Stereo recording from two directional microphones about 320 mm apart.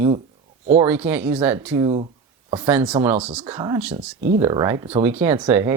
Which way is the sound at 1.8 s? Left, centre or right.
Centre.